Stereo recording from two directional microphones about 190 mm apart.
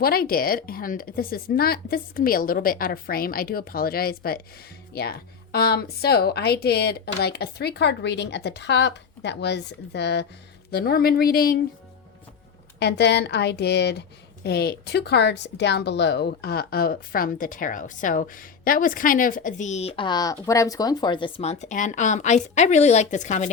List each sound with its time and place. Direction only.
0.0 s speech: 50° left (ahead or behind)
12.8 s speech: 60° left (ahead or behind); by 23.5 s 40° left (ahead or behind)